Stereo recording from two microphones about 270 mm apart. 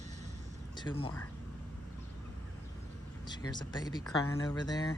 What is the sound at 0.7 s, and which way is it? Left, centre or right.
Speech, centre.